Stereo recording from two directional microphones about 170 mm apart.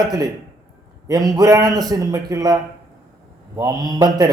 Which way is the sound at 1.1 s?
20° right (ahead or behind).